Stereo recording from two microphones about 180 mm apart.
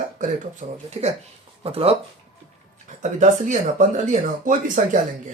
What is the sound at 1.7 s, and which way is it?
Speech, 30° right (ahead or behind).